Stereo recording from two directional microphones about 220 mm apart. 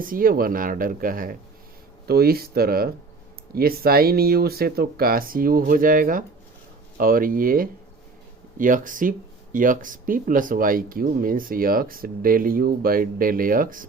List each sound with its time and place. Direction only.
0.0 s speech: 40° right (ahead or behind)